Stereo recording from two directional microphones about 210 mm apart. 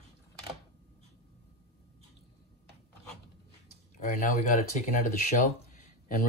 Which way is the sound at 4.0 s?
35° left (ahead or behind).